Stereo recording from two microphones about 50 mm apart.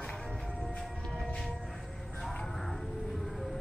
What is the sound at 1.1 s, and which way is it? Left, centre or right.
Music, centre.